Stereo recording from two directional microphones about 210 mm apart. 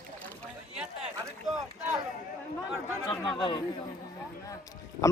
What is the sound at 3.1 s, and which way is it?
Speech, 20° left (ahead or behind).